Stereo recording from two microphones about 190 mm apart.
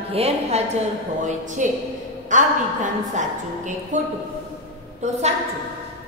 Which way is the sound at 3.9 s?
40° right (ahead or behind).